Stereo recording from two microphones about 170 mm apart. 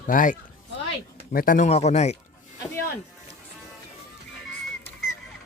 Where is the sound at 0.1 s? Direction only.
50° left (ahead or behind).